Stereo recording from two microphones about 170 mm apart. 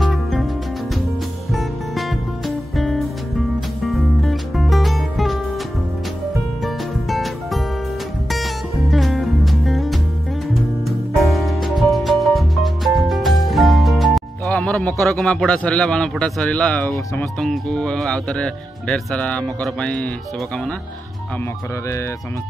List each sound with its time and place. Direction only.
0.0 s music: centre (ahead or behind)
1.5 s music: centre (ahead or behind)
6.6 s music: centre (ahead or behind)
8.9 s music: centre (ahead or behind)
11.2 s music: centre (ahead or behind)
14.1 s a man's voice: 5° left (ahead or behind)